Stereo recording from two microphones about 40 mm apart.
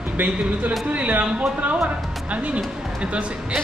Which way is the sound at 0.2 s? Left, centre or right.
Right.